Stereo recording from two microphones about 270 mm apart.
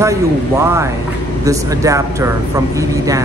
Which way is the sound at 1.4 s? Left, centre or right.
Centre.